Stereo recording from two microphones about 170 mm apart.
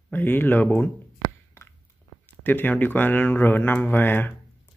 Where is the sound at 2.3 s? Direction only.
10° left (ahead or behind).